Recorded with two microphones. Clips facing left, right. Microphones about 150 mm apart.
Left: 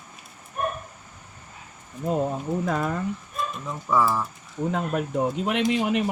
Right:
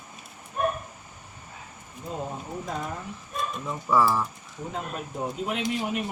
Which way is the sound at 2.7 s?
90° left.